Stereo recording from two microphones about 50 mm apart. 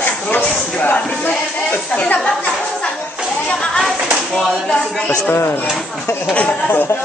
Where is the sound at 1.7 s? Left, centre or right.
Left.